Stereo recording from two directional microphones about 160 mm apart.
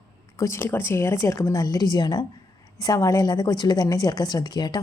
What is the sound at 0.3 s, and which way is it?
A woman's voice, 15° left (ahead or behind).